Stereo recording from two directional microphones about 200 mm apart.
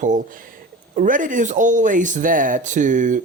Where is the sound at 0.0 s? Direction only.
40° right (ahead or behind).